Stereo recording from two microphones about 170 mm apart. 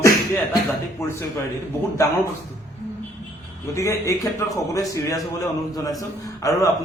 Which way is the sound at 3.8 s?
20° left (ahead or behind).